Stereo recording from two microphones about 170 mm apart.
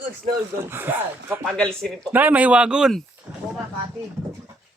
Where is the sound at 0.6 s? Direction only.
10° right (ahead or behind).